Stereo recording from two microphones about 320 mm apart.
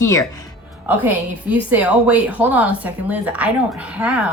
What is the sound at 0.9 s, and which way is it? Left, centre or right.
A woman's voice, centre.